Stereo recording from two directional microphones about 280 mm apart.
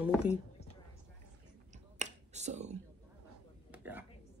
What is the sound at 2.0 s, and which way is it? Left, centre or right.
Finger snapping, right.